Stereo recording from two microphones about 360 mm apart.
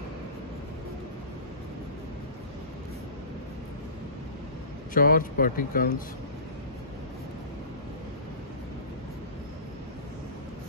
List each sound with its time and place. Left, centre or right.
4.9 s speech: left